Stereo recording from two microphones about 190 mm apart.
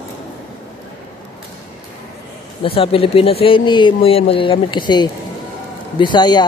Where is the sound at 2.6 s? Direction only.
30° left (ahead or behind).